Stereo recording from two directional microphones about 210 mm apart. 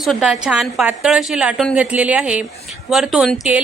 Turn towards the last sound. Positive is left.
turn(degrees=0)  # may be behind; listen again after turning